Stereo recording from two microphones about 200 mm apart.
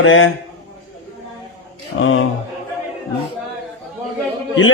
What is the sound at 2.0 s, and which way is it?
Speech, 80° left.